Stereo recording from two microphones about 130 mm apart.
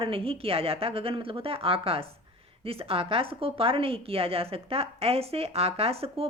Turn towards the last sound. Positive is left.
turn(degrees=-50)  # may be behind; listen again after turning